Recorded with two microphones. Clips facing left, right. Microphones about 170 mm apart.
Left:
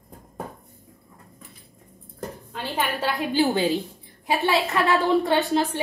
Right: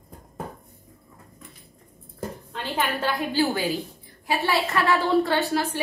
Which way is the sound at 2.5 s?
10° left (ahead or behind).